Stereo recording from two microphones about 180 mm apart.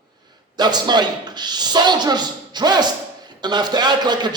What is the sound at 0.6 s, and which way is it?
A man's voice, 25° right (ahead or behind).